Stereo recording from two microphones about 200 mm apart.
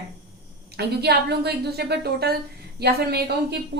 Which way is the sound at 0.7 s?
55° right (ahead or behind).